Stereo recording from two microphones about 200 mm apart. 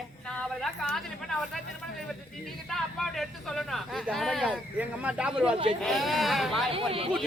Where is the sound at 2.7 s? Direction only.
Centre (ahead or behind).